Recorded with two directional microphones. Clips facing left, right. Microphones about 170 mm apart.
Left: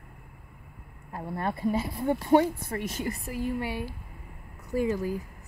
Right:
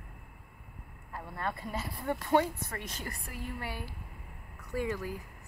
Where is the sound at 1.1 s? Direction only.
40° left (ahead or behind).